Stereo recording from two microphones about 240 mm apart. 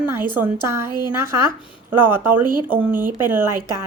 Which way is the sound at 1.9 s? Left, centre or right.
Centre.